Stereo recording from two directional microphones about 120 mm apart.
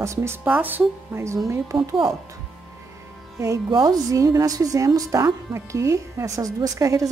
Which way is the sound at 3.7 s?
35° right (ahead or behind).